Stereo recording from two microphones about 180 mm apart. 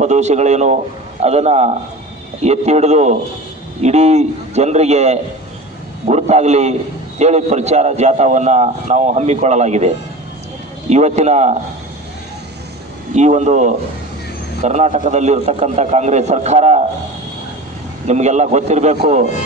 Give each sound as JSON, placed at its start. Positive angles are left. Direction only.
{"t": 0.0, "sound": "a man's voice", "side_deg": -40}
{"t": 13.1, "sound": "a man's voice", "side_deg": -40}
{"t": 18.0, "sound": "a man's voice", "side_deg": -40}